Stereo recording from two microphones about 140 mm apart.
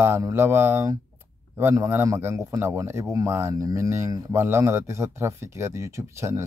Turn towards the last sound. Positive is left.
turn(degrees=-20)  # may be behind; listen again after turning